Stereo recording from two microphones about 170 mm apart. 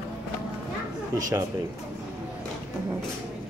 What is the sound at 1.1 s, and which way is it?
Speech, 20° right (ahead or behind).